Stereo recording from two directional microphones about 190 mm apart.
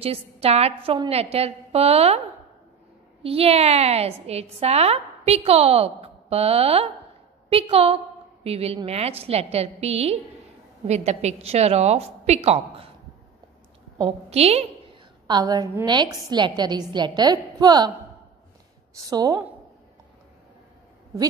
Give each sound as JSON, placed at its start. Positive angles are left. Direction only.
{"t": 0.0, "sound": "a woman's voice", "side_deg": -30}
{"t": 13.9, "sound": "a woman's voice", "side_deg": -30}
{"t": 15.2, "sound": "a woman's voice", "side_deg": -20}
{"t": 18.9, "sound": "a woman's voice", "side_deg": -20}